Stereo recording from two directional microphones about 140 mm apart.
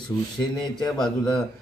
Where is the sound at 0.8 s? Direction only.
Centre (ahead or behind).